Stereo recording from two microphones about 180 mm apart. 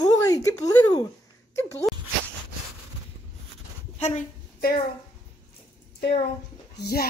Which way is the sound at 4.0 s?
40° left (ahead or behind).